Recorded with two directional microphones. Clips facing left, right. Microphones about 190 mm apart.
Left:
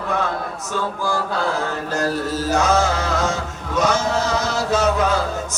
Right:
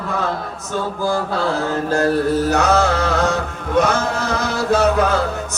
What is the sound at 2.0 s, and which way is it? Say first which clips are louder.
Mantra: right 5 dB; 65° right (ahead or behind).